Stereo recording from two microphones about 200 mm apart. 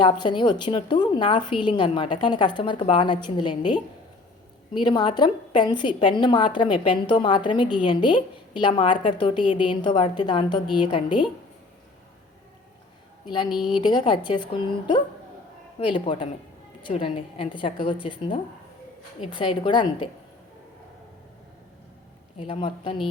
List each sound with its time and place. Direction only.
0.0 s a woman's voice: 25° left (ahead or behind)
4.7 s a woman's voice: 20° left (ahead or behind)
13.2 s a woman's voice: 25° left (ahead or behind)
13.6 s speech: centre (ahead or behind)
13.8 s a woman's voice: 25° left (ahead or behind)
22.4 s a woman's voice: 25° left (ahead or behind)